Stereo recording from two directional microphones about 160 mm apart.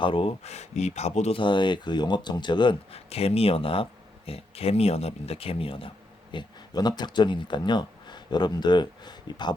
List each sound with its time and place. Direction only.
0.0 s speech: 35° left (ahead or behind)